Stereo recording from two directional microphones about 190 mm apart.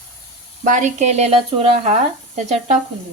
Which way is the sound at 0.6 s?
40° right (ahead or behind).